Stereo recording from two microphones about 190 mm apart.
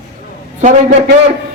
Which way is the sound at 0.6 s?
40° right (ahead or behind).